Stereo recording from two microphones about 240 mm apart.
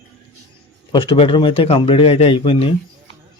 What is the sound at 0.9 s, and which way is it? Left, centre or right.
Speech, left.